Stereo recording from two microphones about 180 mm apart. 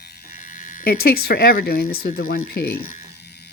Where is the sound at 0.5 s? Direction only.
45° left (ahead or behind).